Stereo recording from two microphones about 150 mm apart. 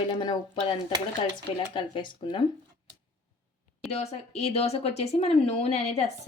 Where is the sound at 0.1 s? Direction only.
35° left (ahead or behind).